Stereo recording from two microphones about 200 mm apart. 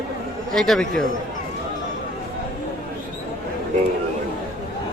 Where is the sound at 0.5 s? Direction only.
Centre (ahead or behind).